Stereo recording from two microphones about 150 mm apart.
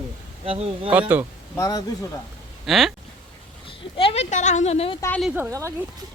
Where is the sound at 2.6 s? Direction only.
Centre (ahead or behind).